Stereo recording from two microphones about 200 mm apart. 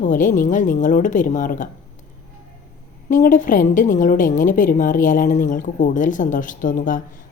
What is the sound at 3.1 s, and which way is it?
A woman's voice, 40° left (ahead or behind).